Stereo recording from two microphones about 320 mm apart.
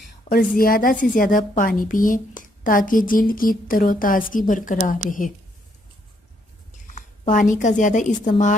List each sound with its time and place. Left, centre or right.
0.3 s a woman's voice: left
7.0 s a woman's voice: left